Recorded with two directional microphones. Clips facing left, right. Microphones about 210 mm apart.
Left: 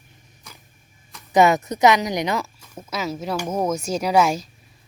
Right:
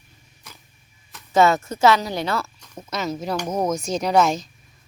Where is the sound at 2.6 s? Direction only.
5° left (ahead or behind).